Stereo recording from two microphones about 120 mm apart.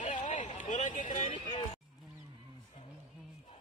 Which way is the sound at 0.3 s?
90° left.